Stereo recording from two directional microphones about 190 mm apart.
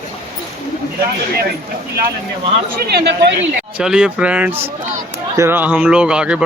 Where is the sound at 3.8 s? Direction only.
5° right (ahead or behind).